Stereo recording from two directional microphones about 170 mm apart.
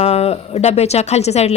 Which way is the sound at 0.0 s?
35° left (ahead or behind).